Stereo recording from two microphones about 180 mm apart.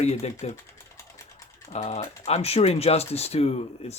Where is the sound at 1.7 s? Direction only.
35° left (ahead or behind).